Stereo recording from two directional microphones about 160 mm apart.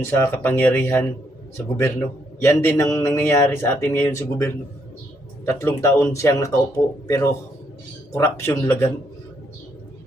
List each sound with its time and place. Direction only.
0.0 s a man's voice: 15° left (ahead or behind)
2.4 s a man's voice: 20° left (ahead or behind)